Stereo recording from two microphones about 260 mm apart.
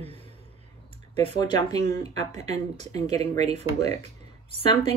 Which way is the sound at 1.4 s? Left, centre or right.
Centre.